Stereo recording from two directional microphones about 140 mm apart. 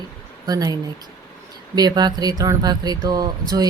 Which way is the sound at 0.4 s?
25° right (ahead or behind).